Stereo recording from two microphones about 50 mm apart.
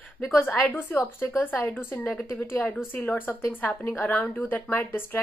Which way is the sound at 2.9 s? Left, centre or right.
Left.